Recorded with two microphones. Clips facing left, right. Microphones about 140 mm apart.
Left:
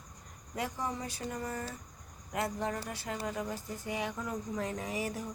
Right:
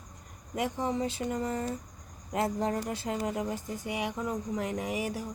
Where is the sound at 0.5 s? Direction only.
20° right (ahead or behind).